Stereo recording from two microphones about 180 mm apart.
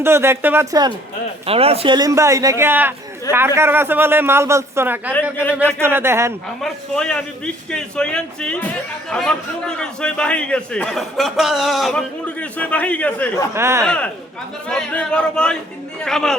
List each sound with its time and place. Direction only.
0.0 s a man's voice: 15° right (ahead or behind)
1.5 s a man's voice: 35° right (ahead or behind); by 6.3 s 15° right (ahead or behind)
6.6 s a man's voice: 5° left (ahead or behind)
13.5 s a man's voice: 15° right (ahead or behind)
13.8 s a man's voice: 5° left (ahead or behind)